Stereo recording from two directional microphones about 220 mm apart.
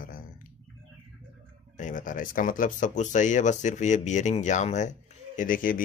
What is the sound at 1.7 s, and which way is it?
Speech, 35° left (ahead or behind).